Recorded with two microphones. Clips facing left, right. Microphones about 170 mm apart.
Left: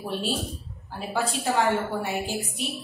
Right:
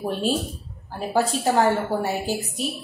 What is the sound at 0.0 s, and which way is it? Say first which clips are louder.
A woman's voice: right 5 dB; 45° right (ahead or behind).